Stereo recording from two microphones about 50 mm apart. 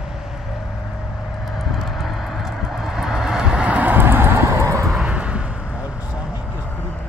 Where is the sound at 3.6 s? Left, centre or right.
Right.